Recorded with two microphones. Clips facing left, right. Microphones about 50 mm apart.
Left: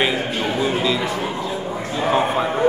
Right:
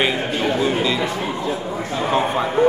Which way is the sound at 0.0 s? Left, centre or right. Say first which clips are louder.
Right 1 dB; centre.